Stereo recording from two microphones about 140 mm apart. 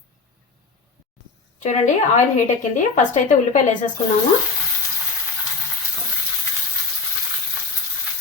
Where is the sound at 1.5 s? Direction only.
55° left (ahead or behind).